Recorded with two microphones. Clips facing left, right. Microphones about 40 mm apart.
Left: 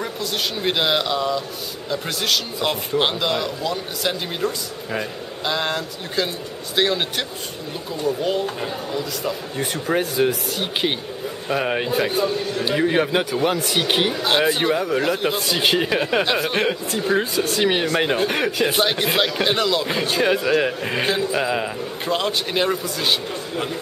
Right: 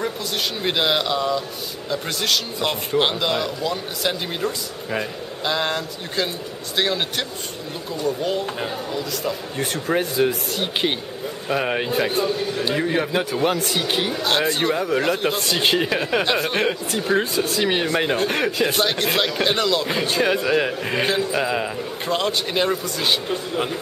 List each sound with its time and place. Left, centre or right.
0.6 s speech: centre
12.8 s speech: centre
13.2 s speech: centre
13.7 s speech: left
14.2 s speech: centre